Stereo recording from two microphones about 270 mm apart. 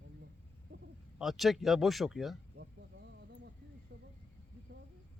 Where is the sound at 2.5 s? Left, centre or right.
Right.